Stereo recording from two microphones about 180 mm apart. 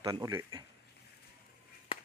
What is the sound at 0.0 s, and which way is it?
Speech, 20° right (ahead or behind).